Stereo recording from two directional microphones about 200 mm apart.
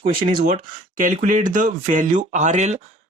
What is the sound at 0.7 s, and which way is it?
Speech, 40° right (ahead or behind).